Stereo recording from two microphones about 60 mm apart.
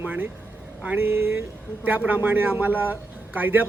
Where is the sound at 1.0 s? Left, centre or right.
Right.